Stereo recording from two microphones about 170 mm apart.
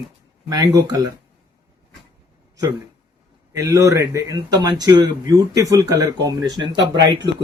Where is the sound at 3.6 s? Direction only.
20° right (ahead or behind).